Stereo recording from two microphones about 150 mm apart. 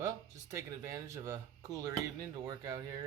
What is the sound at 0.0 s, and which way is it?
Speech, 20° right (ahead or behind).